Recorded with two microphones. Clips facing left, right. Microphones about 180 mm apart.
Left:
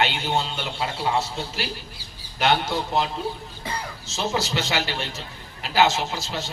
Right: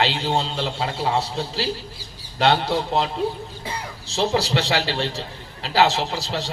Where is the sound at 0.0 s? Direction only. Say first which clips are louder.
Right 2 dB; 30° right (ahead or behind).